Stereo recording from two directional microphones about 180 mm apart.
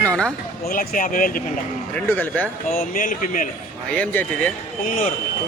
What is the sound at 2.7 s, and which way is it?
Speech, 45° left (ahead or behind).